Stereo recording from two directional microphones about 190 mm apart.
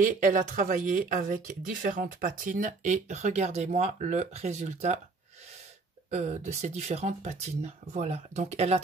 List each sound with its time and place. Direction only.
0.0 s speech: 45° right (ahead or behind)
6.0 s speech: 35° right (ahead or behind)